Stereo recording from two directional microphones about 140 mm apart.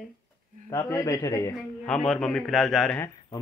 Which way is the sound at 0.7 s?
20° left (ahead or behind).